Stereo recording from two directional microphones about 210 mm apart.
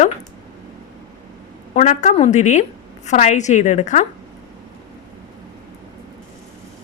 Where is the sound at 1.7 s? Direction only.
35° left (ahead or behind).